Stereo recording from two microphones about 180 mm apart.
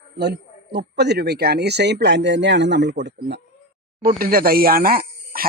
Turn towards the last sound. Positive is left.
turn(degrees=-55)  # may be behind; listen again after turning